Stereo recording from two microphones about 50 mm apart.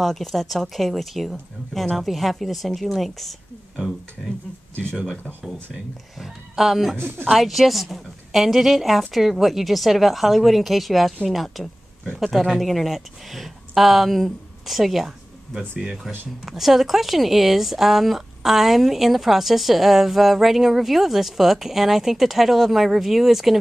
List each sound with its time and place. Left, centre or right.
0.0 s speech: centre
6.1 s speech: centre
7.0 s speech: right
7.2 s speech: centre